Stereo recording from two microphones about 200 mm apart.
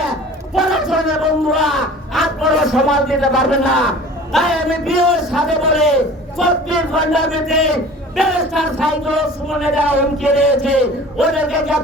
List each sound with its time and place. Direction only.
0.5 s speech: centre (ahead or behind)